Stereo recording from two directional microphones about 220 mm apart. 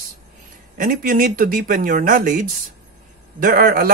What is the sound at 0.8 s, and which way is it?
Speech, 40° right (ahead or behind).